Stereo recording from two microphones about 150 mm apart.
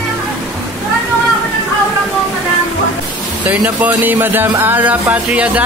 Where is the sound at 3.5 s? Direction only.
10° right (ahead or behind).